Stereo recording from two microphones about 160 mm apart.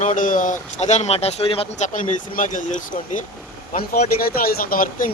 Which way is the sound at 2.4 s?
55° left (ahead or behind).